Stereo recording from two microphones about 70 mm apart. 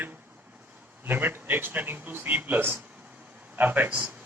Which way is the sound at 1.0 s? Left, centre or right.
Right.